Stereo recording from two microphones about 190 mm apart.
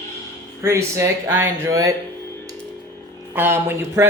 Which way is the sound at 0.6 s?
15° right (ahead or behind).